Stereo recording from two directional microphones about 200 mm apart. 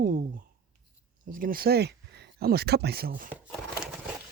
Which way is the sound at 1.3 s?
45° right (ahead or behind).